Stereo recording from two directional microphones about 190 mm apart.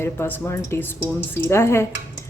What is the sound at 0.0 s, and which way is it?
Speech, 10° left (ahead or behind).